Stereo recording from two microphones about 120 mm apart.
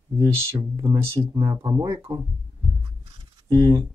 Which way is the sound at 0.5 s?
35° right (ahead or behind).